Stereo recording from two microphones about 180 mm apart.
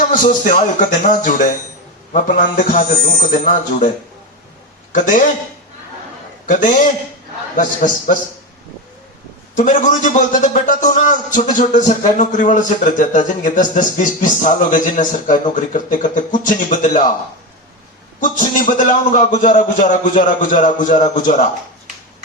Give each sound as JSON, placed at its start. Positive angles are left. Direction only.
{"t": 0.1, "sound": "a man's voice", "side_deg": 45}
{"t": 4.9, "sound": "a man's voice", "side_deg": 45}
{"t": 6.4, "sound": "a man's voice", "side_deg": 45}
{"t": 9.6, "sound": "a man's voice", "side_deg": 45}
{"t": 18.2, "sound": "a man's voice", "side_deg": 50}